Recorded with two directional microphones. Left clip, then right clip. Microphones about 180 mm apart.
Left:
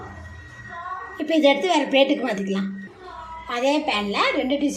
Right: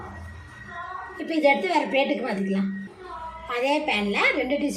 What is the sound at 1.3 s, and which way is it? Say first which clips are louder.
A woman's voice: left 3 dB; 30° left (ahead or behind).